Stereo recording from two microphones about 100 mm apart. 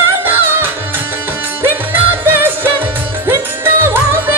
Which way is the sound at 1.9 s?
20° right (ahead or behind).